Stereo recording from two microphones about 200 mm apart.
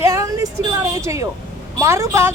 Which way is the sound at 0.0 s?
15° right (ahead or behind).